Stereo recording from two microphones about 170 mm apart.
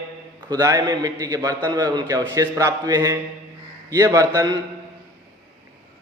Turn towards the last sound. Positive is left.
turn(degrees=-20)  # may be behind; listen again after turning